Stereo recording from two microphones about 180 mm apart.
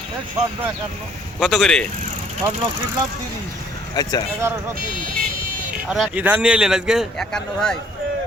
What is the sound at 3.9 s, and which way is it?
Speech, 20° left (ahead or behind).